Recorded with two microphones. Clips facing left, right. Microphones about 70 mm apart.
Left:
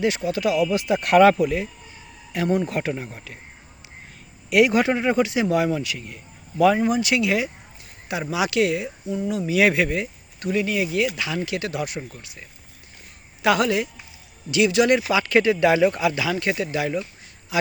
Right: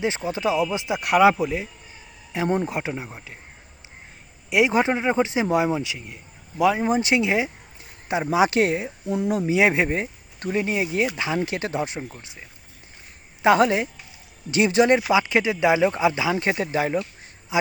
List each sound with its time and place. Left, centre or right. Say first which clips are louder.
0.0 s speech: left 2 dB; right
0.9 s speech: left 2 dB; centre
1.4 s speech: left 3 dB; centre
4.4 s speech: left 2 dB; right
6.6 s speech: left 3 dB; centre
6.8 s speech: even; right
9.1 s speech: right 2 dB; right
9.5 s speech: left 2 dB; right
15.2 s speech: left 3 dB; centre; by 17.0 s right
17.5 s speech: even; right